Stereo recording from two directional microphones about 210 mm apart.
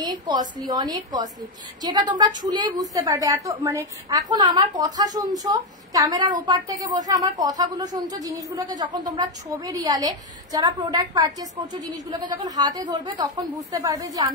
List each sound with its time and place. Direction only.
0.0 s a woman's voice: 20° right (ahead or behind)